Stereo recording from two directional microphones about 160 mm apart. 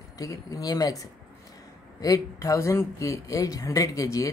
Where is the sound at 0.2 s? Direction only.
20° left (ahead or behind).